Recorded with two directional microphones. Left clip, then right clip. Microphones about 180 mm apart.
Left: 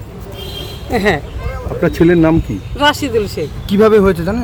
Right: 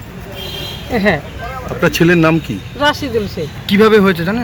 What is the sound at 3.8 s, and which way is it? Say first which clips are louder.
Speech: left 1 dB; 60° left (ahead or behind).